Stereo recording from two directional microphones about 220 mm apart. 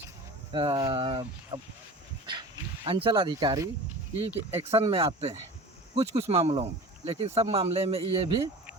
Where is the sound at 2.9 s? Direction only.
25° right (ahead or behind).